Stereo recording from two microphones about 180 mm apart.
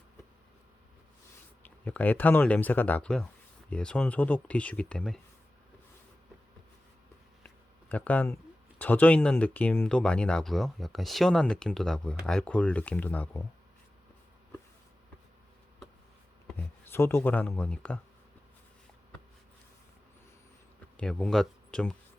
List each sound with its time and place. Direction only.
1.6 s speech: 10° left (ahead or behind)
7.4 s a sound: 10° left (ahead or behind)
8.8 s speech: 10° left (ahead or behind)
16.5 s speech: 10° left (ahead or behind)
20.9 s speech: 5° left (ahead or behind)